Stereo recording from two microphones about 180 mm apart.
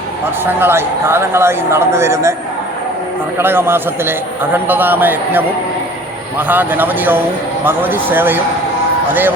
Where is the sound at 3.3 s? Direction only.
10° right (ahead or behind).